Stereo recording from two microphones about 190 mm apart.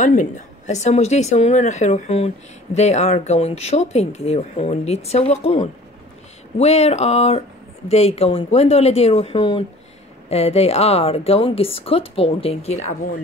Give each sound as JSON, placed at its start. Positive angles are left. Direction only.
{"t": 0.0, "sound": "speech", "side_deg": 40}